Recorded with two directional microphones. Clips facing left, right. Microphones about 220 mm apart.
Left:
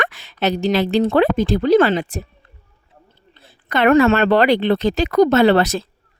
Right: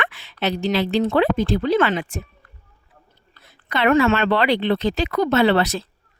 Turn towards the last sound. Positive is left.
turn(degrees=45)  # may be behind; listen again after turning